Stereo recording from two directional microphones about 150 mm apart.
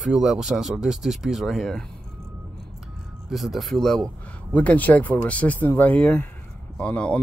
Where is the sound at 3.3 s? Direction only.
Centre (ahead or behind).